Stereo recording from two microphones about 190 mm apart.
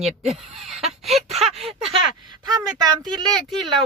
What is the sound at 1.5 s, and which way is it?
Speech, 30° right (ahead or behind).